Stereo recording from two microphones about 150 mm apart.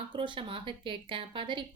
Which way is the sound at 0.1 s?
35° right (ahead or behind).